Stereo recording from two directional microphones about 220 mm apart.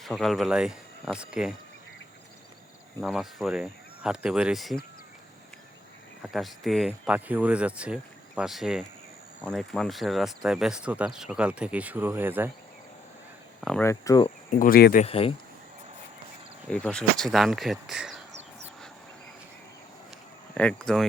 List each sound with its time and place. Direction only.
0.0 s speech: centre (ahead or behind)
3.0 s speech: centre (ahead or behind)
6.2 s speech: centre (ahead or behind)
13.6 s speech: 5° left (ahead or behind)
13.8 s speech: 15° left (ahead or behind)
14.6 s speech: 45° left (ahead or behind)
15.0 s speech: 25° left (ahead or behind)
16.6 s speech: 5° left (ahead or behind)
20.5 s speech: 5° left (ahead or behind)